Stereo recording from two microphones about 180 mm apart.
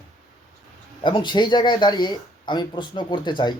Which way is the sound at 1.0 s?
25° left (ahead or behind).